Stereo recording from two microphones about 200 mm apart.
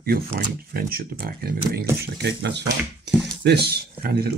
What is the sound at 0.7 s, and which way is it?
Speech, 50° right (ahead or behind).